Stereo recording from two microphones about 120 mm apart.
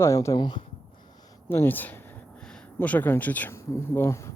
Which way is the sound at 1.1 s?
35° left (ahead or behind).